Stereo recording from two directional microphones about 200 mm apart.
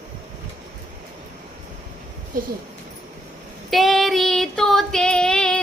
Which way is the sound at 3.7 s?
Centre (ahead or behind).